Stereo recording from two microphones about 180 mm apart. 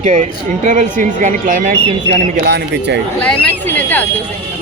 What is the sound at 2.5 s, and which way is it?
Speech, 70° right (ahead or behind).